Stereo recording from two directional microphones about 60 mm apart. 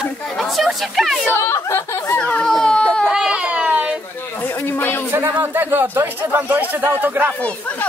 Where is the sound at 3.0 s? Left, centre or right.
Centre.